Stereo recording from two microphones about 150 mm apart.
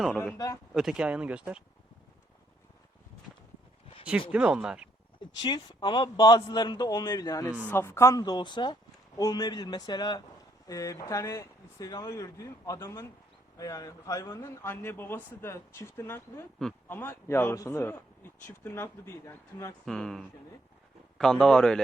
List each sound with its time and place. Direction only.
0.3 s speech: 25° left (ahead or behind)
0.7 s speech: 5° right (ahead or behind)
4.3 s speech: 10° right (ahead or behind)
5.2 s a man's voice: 30° left (ahead or behind)
19.8 s a man's voice: 5° left (ahead or behind)